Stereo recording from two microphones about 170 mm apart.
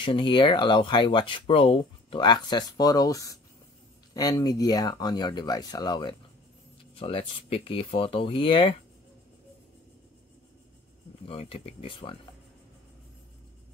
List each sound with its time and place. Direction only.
0.0 s speech: 30° left (ahead or behind)
11.2 s speech: 35° left (ahead or behind)